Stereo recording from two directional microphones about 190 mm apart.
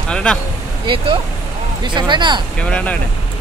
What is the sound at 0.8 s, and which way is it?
Speech, 25° right (ahead or behind).